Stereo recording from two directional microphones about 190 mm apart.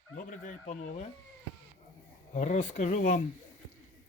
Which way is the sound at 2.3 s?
40° left (ahead or behind).